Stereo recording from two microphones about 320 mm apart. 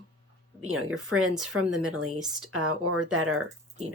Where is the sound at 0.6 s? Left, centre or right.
Right.